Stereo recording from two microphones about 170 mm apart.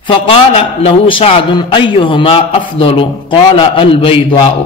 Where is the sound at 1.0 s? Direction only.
35° left (ahead or behind).